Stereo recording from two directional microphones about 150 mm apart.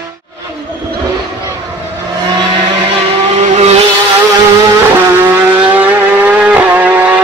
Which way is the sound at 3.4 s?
50° right (ahead or behind).